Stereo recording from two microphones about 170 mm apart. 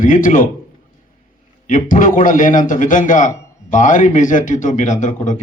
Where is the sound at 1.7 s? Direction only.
50° left (ahead or behind).